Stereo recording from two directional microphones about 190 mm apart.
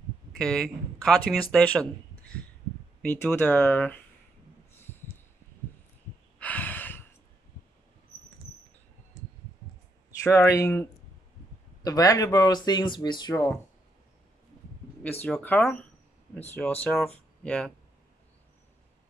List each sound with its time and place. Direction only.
0.4 s speech: 5° left (ahead or behind)
3.0 s speech: 10° left (ahead or behind)
6.4 s a sound: 10° left (ahead or behind)
10.2 s speech: 15° left (ahead or behind)
15.2 s speech: 5° left (ahead or behind)